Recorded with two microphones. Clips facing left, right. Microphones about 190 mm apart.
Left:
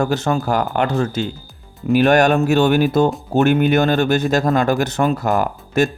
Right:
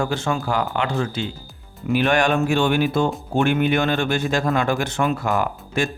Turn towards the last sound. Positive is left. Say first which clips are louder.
# left 5 dB
turn(degrees=40)  # may be behind; listen again after turning